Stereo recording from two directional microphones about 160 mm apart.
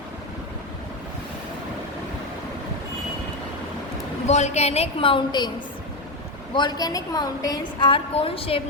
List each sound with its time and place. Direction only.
4.3 s a woman's voice: 45° left (ahead or behind)
6.5 s a woman's voice: 25° left (ahead or behind)